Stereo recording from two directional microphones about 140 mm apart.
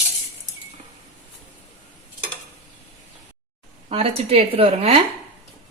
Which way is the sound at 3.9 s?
45° right (ahead or behind).